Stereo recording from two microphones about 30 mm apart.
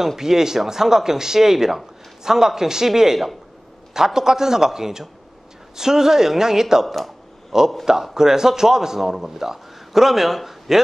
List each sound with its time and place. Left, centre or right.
0.0 s a man's voice: centre